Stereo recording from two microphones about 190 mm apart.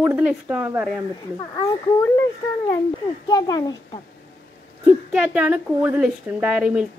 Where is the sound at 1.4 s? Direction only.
15° left (ahead or behind).